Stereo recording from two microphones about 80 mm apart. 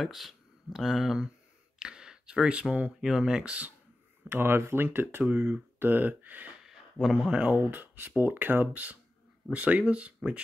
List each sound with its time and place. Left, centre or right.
0.0 s speech: centre
4.3 s speech: right
6.6 s speech: centre